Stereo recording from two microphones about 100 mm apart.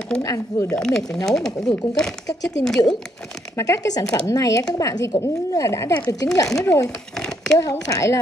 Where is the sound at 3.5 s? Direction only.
35° left (ahead or behind).